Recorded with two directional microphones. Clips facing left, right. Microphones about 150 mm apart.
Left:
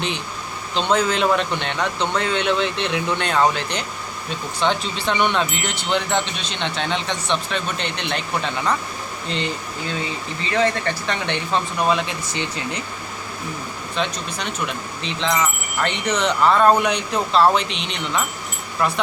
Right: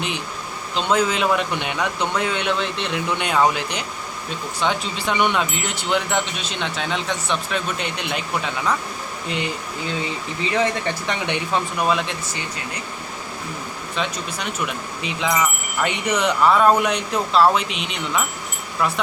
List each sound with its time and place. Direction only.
0.8 s speech: 5° right (ahead or behind)
10.4 s speech: 15° right (ahead or behind)
12.3 s speech: 25° left (ahead or behind)
13.9 s speech: 5° right (ahead or behind)